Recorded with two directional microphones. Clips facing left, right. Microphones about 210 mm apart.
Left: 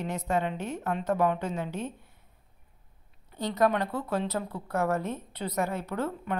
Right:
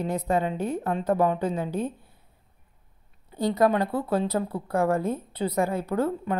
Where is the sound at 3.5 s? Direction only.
30° right (ahead or behind).